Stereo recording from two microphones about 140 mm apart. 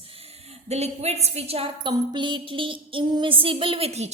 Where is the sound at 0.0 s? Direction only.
45° right (ahead or behind).